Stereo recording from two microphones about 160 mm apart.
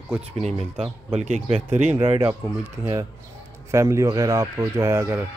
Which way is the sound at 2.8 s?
20° right (ahead or behind).